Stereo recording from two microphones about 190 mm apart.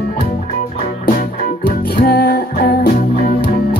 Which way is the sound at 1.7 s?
50° left (ahead or behind).